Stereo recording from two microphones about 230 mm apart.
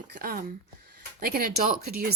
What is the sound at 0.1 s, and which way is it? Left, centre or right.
A woman's voice, right.